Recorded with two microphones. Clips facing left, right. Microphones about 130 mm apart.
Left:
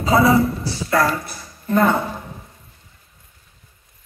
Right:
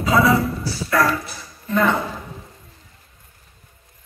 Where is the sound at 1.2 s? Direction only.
40° left (ahead or behind).